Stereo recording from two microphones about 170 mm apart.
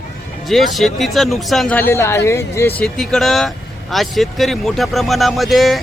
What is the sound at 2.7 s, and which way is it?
Speech, 5° left (ahead or behind).